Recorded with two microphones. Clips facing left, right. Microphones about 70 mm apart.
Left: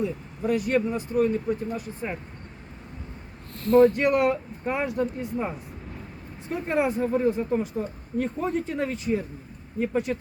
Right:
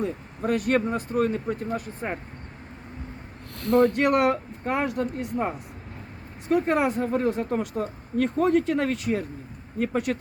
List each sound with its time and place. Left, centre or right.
0.0 s speech: right
3.7 s speech: right